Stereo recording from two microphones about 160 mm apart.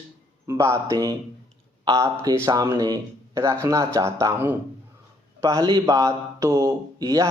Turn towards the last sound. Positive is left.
turn(degrees=-25)  # may be behind; listen again after turning